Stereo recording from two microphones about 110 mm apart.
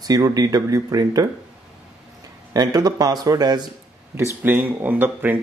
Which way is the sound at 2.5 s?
35° right (ahead or behind).